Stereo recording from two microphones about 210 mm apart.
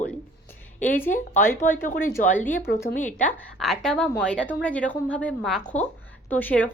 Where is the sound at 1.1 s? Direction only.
35° left (ahead or behind).